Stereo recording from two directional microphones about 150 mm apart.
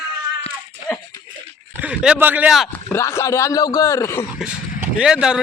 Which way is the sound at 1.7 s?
10° right (ahead or behind).